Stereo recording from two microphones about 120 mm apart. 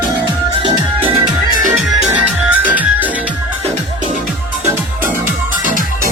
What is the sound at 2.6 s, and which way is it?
Music, 15° right (ahead or behind).